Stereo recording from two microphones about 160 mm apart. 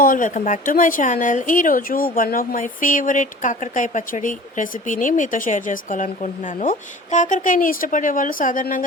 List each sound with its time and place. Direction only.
0.0 s speech: 55° left (ahead or behind)